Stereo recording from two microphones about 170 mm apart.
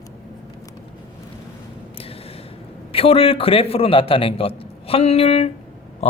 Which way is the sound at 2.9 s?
35° left (ahead or behind).